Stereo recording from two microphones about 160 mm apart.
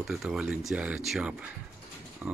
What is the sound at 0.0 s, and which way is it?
Speech, 5° right (ahead or behind).